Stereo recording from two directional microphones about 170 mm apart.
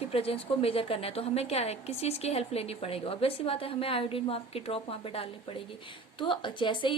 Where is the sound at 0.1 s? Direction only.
35° left (ahead or behind).